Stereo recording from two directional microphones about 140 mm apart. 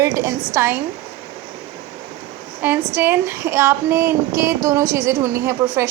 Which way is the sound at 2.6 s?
15° right (ahead or behind).